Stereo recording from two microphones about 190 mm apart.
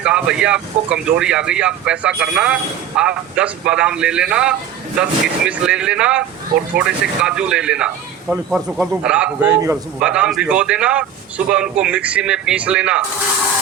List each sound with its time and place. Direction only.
0.0 s speech: 5° right (ahead or behind)